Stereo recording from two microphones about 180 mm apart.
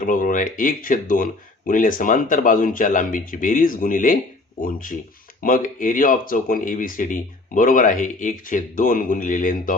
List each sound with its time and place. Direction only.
0.0 s speech: 50° left (ahead or behind)